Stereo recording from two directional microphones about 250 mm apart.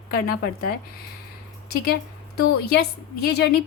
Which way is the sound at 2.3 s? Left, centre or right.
Left.